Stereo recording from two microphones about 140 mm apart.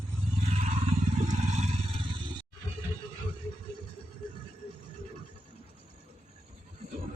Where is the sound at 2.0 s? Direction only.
35° right (ahead or behind).